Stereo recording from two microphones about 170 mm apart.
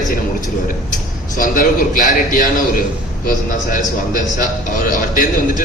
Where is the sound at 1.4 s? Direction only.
55° left (ahead or behind).